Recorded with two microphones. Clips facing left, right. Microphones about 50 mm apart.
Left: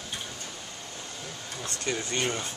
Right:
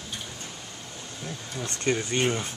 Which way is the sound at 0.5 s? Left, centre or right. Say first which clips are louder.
Even; centre.